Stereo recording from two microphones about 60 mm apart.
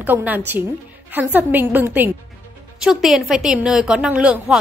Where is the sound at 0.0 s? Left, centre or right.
Right.